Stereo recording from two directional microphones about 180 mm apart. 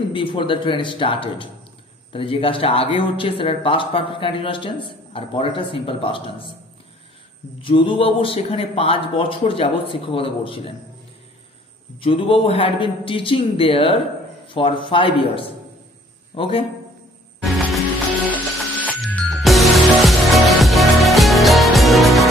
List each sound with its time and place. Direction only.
0.1 s speech: 30° left (ahead or behind)
7.6 s speech: 30° left (ahead or behind)
12.0 s speech: 30° left (ahead or behind)
18.3 s music: 10° left (ahead or behind)